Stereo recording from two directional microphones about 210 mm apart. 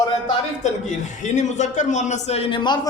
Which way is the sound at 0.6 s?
35° left (ahead or behind).